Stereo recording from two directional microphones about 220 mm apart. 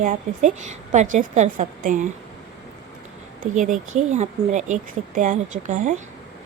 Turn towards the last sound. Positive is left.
turn(degrees=-35)  # may be behind; listen again after turning